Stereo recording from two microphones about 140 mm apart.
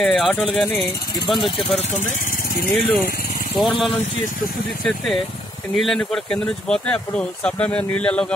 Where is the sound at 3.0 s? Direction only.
90° left.